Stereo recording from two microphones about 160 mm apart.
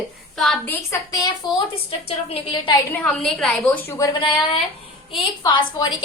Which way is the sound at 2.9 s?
5° left (ahead or behind).